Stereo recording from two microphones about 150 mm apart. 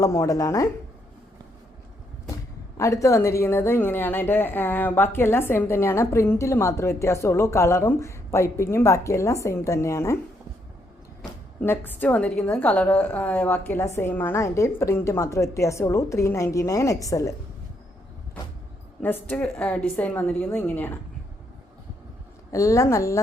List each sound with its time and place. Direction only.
0.0 s speech: 20° left (ahead or behind)
2.7 s a woman's voice: 20° left (ahead or behind)
11.2 s a woman's voice: 15° left (ahead or behind)
19.0 s a woman's voice: 15° left (ahead or behind)
22.5 s speech: 20° left (ahead or behind)